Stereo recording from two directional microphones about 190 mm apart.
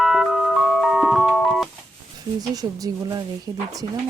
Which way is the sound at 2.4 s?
20° right (ahead or behind).